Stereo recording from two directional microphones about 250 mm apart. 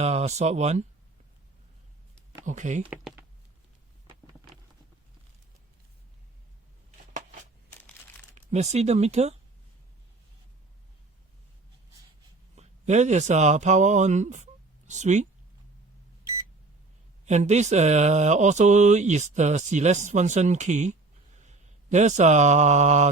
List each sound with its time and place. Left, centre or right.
0.0 s speech: right
2.4 s speech: right
2.9 s speech: centre
7.7 s crumpling: centre
8.4 s speech: right
12.5 s speech: right
17.2 s speech: right